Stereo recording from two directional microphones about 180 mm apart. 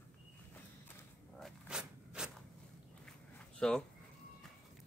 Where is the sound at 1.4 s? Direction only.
5° right (ahead or behind).